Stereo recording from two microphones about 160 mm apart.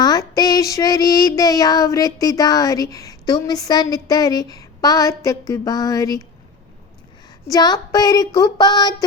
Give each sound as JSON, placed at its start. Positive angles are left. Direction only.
{"t": 0.0, "sound": "child singing", "side_deg": 25}
{"t": 7.4, "sound": "child singing", "side_deg": 25}